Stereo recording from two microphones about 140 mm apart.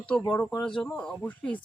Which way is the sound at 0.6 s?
5° left (ahead or behind).